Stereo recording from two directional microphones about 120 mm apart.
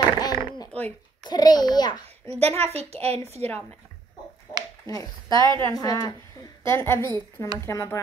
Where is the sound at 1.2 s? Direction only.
35° left (ahead or behind).